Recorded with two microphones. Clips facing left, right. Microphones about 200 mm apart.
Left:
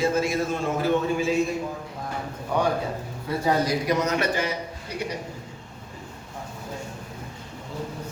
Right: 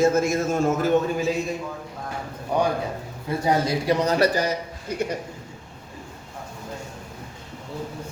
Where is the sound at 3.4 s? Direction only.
30° right (ahead or behind); by 5.1 s 45° right (ahead or behind).